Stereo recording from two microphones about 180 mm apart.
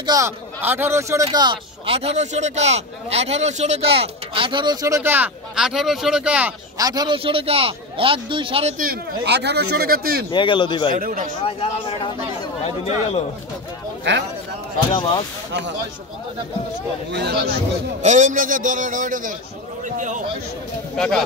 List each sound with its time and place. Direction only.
0.0 s speech: 20° right (ahead or behind)
6.8 s speech: 20° right (ahead or behind)
8.7 s speech: 55° right (ahead or behind)
10.3 s speech: 25° left (ahead or behind)
11.0 s a man's voice: 50° right (ahead or behind)
11.4 s speech: 30° left (ahead or behind)
14.9 s speech: 30° left (ahead or behind)
17.1 s speech: 65° right (ahead or behind)
18.0 s a man's voice: 45° right (ahead or behind)
20.9 s speech: 5° left (ahead or behind)